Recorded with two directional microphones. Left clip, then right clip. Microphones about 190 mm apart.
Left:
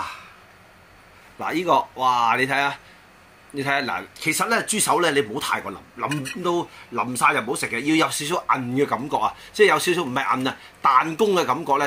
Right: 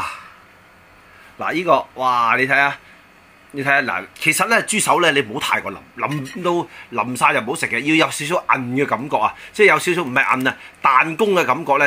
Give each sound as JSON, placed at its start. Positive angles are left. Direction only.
{"t": 1.4, "sound": "speech", "side_deg": -25}